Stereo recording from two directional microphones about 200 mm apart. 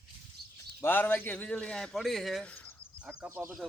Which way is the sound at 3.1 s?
10° right (ahead or behind).